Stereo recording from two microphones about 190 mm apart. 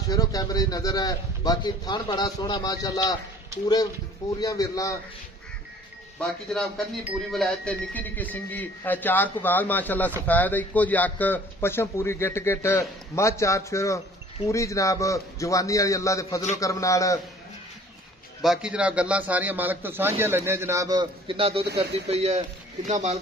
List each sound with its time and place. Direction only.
0.1 s a man's voice: 20° left (ahead or behind)
6.1 s speech: centre (ahead or behind); by 17.2 s 15° left (ahead or behind)
18.4 s a man's voice: 5° right (ahead or behind); by 23.1 s 40° right (ahead or behind)